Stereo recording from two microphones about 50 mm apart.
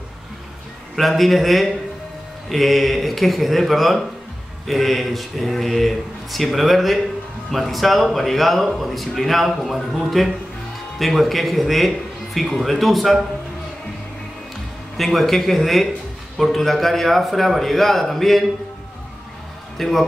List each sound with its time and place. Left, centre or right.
0.9 s speech: centre
15.0 s speech: centre
19.8 s speech: centre